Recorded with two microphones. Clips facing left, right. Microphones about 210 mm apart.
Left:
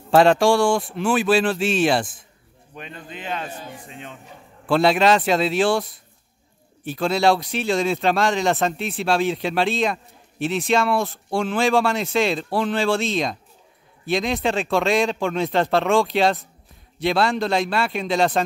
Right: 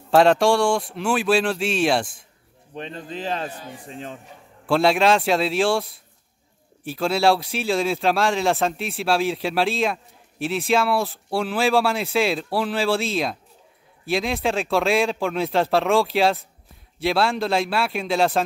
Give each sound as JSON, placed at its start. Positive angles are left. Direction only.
{"t": 0.1, "sound": "speech", "side_deg": 0}
{"t": 2.7, "sound": "a man's voice", "side_deg": -35}
{"t": 4.6, "sound": "speech", "side_deg": 0}